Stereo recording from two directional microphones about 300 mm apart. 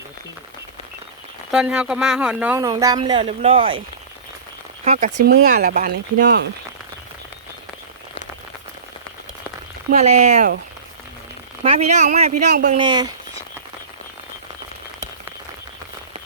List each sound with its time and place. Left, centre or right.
1.5 s speech: centre
4.9 s speech: right
10.0 s speech: right
11.6 s speech: centre
12.8 s speech: centre